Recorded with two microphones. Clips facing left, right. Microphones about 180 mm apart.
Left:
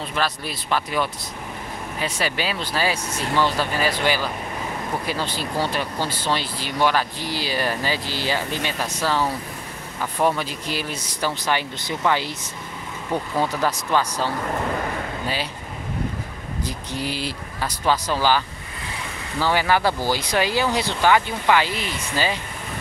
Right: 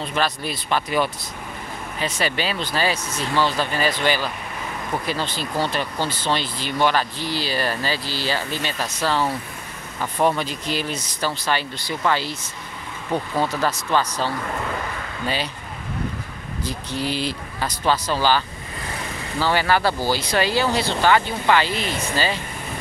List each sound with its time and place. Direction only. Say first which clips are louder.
0.1 s speech: right 2 dB; centre (ahead or behind)
10.2 s speech: right 1 dB; 5° left (ahead or behind)
16.6 s speech: right 3 dB; 15° left (ahead or behind)
19.4 s speech: even; 15° left (ahead or behind)